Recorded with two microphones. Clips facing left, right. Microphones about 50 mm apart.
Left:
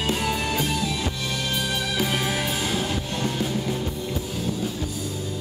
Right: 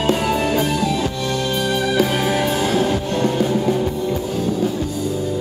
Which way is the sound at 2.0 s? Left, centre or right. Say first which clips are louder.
Right 7 dB; centre.